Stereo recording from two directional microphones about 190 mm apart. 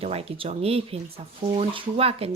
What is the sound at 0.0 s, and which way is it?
Speech, 30° right (ahead or behind).